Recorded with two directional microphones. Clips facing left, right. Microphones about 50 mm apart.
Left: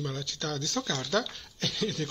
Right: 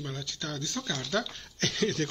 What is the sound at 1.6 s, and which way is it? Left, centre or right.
Speech, right.